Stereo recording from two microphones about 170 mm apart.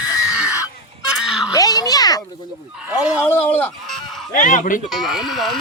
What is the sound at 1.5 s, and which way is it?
Speech, 20° left (ahead or behind).